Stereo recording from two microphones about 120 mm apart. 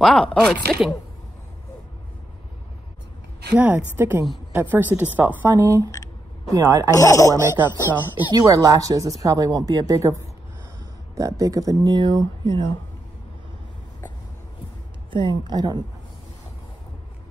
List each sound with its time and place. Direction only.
0.0 s speech: 5° left (ahead or behind)
3.5 s a woman's voice: 15° right (ahead or behind)
6.6 s a woman's voice: 20° right (ahead or behind)
7.0 s speech: 25° left (ahead or behind)
7.3 s a woman's voice: 15° right (ahead or behind)
8.3 s a woman's voice: 30° right (ahead or behind)
11.1 s speech: 25° right (ahead or behind)
15.0 s speech: 45° right (ahead or behind)